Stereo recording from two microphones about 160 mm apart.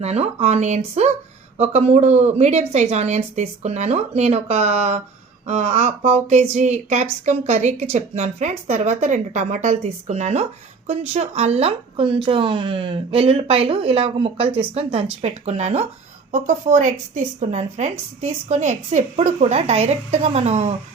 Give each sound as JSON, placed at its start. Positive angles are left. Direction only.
{"t": 0.0, "sound": "a woman's voice", "side_deg": -40}